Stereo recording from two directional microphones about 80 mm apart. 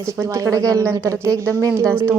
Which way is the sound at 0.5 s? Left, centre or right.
Right.